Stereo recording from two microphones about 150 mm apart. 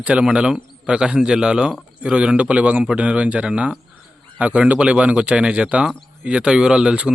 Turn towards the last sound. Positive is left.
turn(degrees=-5)  # may be behind; listen again after turning